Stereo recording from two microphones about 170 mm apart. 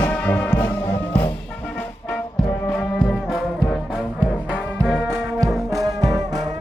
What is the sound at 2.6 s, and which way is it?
Brass instrument, 5° left (ahead or behind).